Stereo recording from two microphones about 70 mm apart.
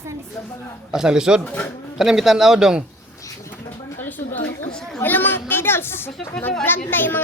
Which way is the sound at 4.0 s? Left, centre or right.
Left.